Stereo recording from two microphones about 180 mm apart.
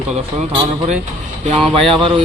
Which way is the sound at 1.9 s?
25° right (ahead or behind).